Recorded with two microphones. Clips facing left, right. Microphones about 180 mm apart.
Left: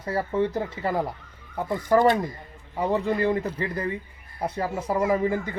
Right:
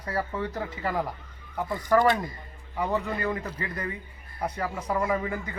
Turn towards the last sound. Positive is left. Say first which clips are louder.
# left 5 dB
turn(degrees=30)  # may be behind; listen again after turning